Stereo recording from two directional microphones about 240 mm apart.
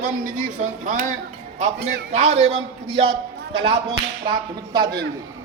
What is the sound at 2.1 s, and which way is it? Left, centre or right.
A man's voice, right.